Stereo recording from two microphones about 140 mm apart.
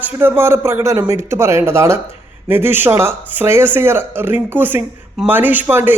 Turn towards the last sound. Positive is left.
turn(degrees=-15)  # may be behind; listen again after turning